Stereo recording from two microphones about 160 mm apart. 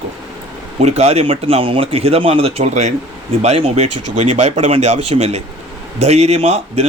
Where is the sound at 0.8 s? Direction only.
45° right (ahead or behind).